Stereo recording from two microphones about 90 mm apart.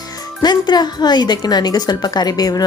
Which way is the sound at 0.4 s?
55° left (ahead or behind).